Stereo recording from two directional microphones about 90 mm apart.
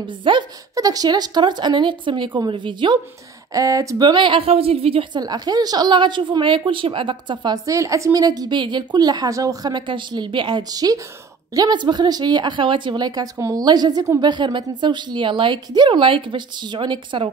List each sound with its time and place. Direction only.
0.0 s a woman's voice: 60° right (ahead or behind)
0.7 s a woman's voice: 45° right (ahead or behind); by 3.0 s 60° right (ahead or behind)
3.5 s speech: 40° right (ahead or behind)
4.0 s a woman's voice: 60° right (ahead or behind); by 5.2 s 90° right
5.2 s a woman's voice: 45° right (ahead or behind); by 7.5 s 65° right (ahead or behind)
7.5 s a woman's voice: 35° right (ahead or behind)
9.7 s a woman's voice: 60° right (ahead or behind)
10.6 s a woman's voice: 45° right (ahead or behind); by 17.3 s 65° right (ahead or behind)